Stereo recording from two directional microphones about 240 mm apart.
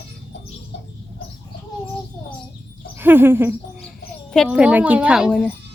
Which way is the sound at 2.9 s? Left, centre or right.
Centre.